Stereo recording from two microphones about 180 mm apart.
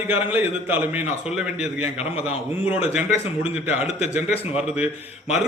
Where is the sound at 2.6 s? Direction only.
10° right (ahead or behind).